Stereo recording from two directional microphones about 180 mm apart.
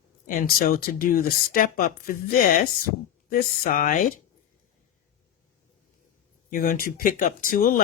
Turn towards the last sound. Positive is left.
turn(degrees=50)  # may be behind; listen again after turning